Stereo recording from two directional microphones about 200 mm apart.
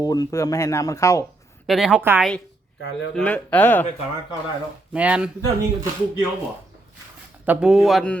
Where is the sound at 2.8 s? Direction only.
65° left (ahead or behind).